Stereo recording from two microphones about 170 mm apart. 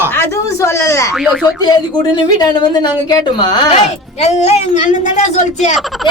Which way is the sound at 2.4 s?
25° left (ahead or behind).